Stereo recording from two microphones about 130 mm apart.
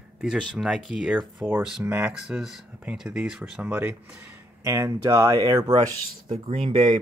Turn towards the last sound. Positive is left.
turn(degrees=-40)  # may be behind; listen again after turning